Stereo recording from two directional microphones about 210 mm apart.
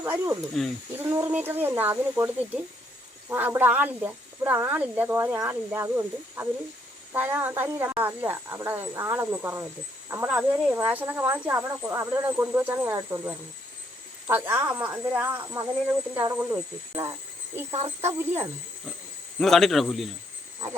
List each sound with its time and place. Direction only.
0.0 s speech: 10° right (ahead or behind)
0.6 s speech: centre (ahead or behind)
0.9 s speech: 10° right (ahead or behind)
19.4 s speech: centre (ahead or behind)